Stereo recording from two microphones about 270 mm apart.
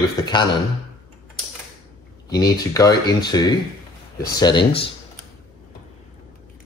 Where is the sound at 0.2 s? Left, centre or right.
Centre.